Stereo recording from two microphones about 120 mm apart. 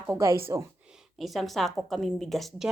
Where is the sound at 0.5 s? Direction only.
30° right (ahead or behind).